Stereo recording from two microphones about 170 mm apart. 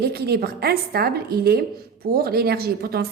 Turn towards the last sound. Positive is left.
turn(degrees=-65)  # may be behind; listen again after turning